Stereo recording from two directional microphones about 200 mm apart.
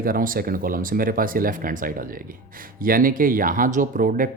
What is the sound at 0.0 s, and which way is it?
Speech, 45° right (ahead or behind).